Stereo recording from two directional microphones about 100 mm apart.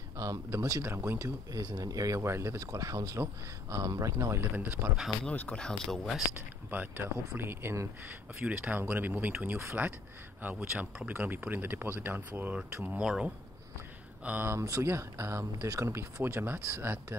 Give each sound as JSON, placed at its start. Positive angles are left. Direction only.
{"t": 0.2, "sound": "speech", "side_deg": -30}
{"t": 1.5, "sound": "speech", "side_deg": -40}
{"t": 4.6, "sound": "speech", "side_deg": -15}
{"t": 5.2, "sound": "speech", "side_deg": 15}
{"t": 6.7, "sound": "speech", "side_deg": -20}
{"t": 8.5, "sound": "speech", "side_deg": -15}
{"t": 14.6, "sound": "speech", "side_deg": -30}